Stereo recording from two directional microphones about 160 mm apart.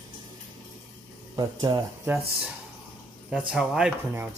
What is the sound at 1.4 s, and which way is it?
Speech, 30° right (ahead or behind).